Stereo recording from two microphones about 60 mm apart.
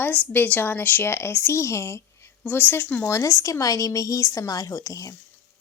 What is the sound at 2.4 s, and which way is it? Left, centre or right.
Speech, left.